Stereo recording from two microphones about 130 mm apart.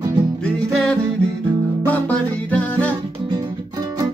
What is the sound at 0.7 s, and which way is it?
Music, 5° left (ahead or behind).